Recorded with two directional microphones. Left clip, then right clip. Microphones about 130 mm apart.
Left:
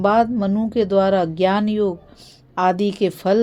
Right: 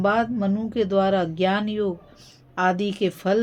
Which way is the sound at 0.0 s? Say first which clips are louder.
Left 5 dB; 35° left (ahead or behind).